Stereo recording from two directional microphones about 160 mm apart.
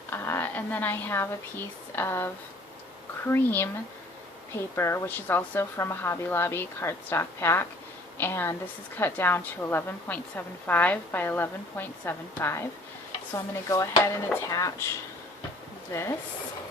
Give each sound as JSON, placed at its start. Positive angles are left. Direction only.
{"t": 0.1, "sound": "a woman's voice", "side_deg": 15}
{"t": 15.9, "sound": "a woman's voice", "side_deg": 20}